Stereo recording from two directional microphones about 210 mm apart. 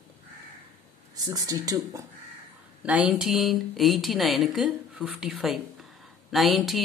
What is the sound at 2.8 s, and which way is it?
Speech, 5° right (ahead or behind).